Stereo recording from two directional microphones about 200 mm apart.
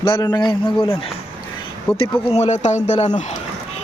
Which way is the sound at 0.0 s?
25° left (ahead or behind).